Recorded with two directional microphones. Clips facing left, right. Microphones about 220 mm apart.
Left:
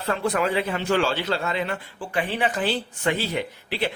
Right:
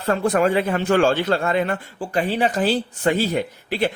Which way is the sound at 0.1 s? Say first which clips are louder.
Right 5 dB; 45° right (ahead or behind).